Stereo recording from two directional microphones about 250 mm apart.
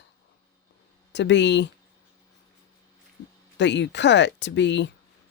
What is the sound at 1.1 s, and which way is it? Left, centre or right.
Speech, left.